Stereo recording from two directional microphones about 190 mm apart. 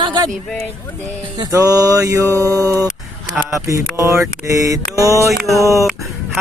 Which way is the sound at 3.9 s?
15° right (ahead or behind).